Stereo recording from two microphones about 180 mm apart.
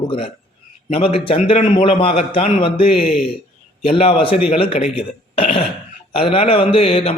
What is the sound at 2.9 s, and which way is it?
Speech, 5° right (ahead or behind).